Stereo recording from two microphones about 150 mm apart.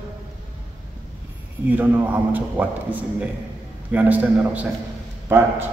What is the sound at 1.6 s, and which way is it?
A man's voice, 10° right (ahead or behind).